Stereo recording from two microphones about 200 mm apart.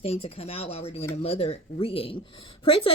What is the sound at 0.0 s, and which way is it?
Speech, 30° left (ahead or behind).